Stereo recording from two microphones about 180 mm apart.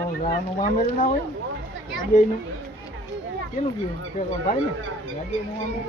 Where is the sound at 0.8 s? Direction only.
40° left (ahead or behind).